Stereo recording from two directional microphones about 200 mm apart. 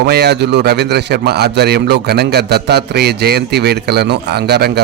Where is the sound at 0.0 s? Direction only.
55° right (ahead or behind).